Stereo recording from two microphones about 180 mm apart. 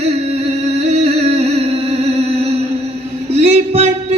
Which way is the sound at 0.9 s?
35° right (ahead or behind).